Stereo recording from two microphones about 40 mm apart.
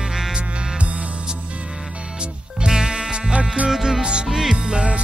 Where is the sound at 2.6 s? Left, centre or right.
Centre.